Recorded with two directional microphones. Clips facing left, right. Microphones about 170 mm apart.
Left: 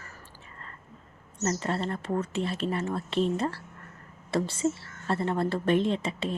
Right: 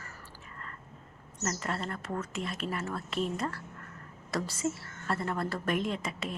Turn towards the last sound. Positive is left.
turn(degrees=30)  # may be behind; listen again after turning